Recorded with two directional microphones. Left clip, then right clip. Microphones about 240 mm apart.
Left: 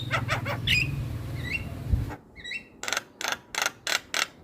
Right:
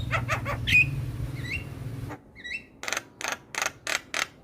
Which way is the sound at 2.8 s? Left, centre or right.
Centre.